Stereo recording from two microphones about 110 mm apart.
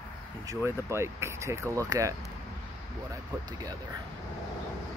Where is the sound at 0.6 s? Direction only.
25° right (ahead or behind).